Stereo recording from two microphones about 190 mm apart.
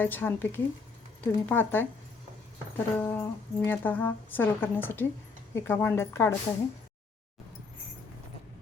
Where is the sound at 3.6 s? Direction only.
10° left (ahead or behind).